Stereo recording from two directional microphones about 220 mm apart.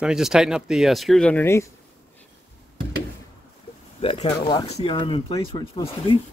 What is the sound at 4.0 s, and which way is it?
Speech, 25° left (ahead or behind).